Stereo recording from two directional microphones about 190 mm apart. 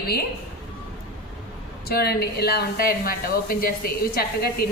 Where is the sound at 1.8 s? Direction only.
55° left (ahead or behind).